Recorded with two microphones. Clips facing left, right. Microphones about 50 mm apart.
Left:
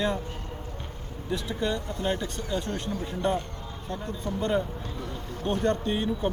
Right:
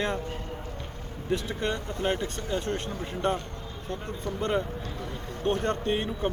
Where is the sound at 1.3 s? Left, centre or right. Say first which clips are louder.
Even; right.